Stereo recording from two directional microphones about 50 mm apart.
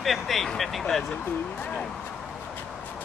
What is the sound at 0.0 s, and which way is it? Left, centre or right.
Vehicle, centre.